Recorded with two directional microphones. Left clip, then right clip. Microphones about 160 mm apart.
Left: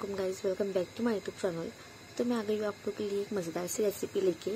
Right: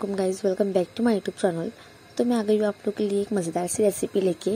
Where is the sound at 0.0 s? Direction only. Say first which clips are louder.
Right 8 dB; 40° right (ahead or behind).